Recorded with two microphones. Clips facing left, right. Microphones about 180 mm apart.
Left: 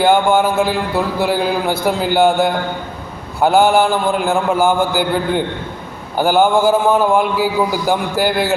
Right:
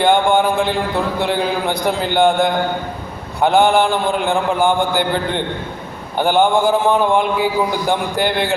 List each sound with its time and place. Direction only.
0.0 s a man's voice: 5° left (ahead or behind)